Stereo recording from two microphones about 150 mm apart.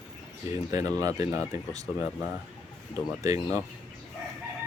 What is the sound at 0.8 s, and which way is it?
Speech, 25° right (ahead or behind).